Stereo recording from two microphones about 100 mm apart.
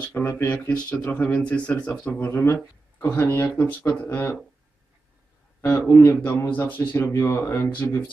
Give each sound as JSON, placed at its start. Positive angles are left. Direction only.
{"t": 0.1, "sound": "speech", "side_deg": 20}
{"t": 2.4, "sound": "speech", "side_deg": 30}
{"t": 5.6, "sound": "speech", "side_deg": 25}